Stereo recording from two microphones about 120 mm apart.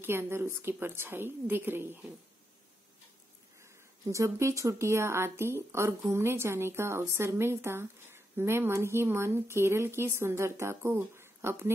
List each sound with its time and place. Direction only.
0.0 s a woman's voice: 20° right (ahead or behind)
3.6 s a woman's voice: 25° right (ahead or behind)